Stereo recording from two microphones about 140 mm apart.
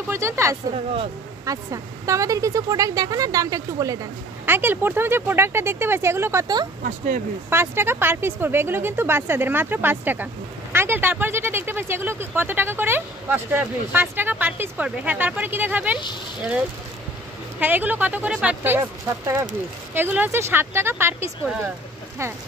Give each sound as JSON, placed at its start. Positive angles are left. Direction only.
{"t": 0.1, "sound": "speech", "side_deg": -20}
{"t": 6.4, "sound": "speech", "side_deg": -30}
{"t": 7.4, "sound": "speech", "side_deg": -15}
{"t": 17.6, "sound": "speech", "side_deg": -15}
{"t": 21.5, "sound": "speech", "side_deg": -5}